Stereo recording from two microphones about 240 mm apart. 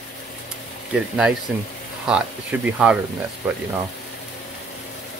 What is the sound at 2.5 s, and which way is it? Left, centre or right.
Speech, centre.